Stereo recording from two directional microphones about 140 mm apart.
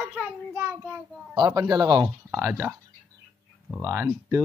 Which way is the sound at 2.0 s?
15° right (ahead or behind).